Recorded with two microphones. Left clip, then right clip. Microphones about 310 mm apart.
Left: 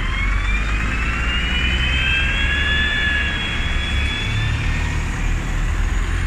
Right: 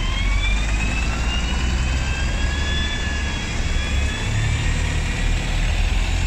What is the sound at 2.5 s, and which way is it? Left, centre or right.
Vehicle, right.